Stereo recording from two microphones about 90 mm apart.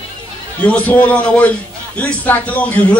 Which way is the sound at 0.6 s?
15° left (ahead or behind).